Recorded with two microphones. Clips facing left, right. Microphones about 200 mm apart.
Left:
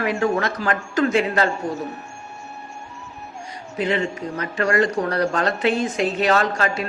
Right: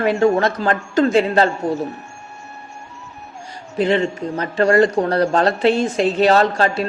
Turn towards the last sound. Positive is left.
turn(degrees=-30)  # may be behind; listen again after turning